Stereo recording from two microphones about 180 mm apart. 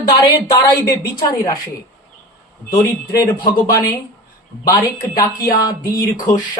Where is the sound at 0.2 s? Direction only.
20° left (ahead or behind).